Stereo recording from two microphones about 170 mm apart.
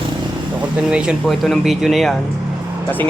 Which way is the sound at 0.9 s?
5° right (ahead or behind).